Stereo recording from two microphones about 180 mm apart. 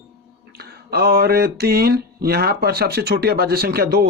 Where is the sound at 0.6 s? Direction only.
60° right (ahead or behind).